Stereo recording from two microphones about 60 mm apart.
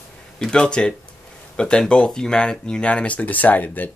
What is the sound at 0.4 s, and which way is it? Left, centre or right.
Speech, centre.